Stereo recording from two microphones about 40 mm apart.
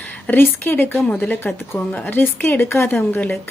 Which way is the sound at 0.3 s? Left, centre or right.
Left.